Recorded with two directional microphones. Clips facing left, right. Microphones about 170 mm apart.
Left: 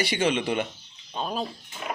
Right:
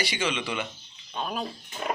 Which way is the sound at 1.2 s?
25° left (ahead or behind).